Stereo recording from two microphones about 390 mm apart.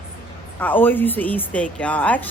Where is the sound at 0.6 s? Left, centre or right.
Centre.